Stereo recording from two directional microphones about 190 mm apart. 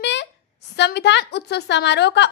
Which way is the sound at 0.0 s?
65° left (ahead or behind).